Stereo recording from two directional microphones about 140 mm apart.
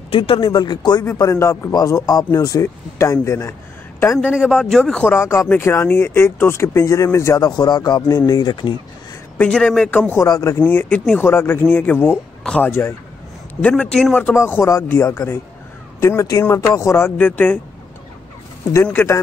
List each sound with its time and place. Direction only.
0.1 s a man's voice: 40° left (ahead or behind); by 4.3 s 20° left (ahead or behind)
4.3 s a man's voice: 5° right (ahead or behind)
5.1 s speech: 15° left (ahead or behind)
9.4 s a man's voice: 5° left (ahead or behind)
18.9 s a man's voice: 15° left (ahead or behind)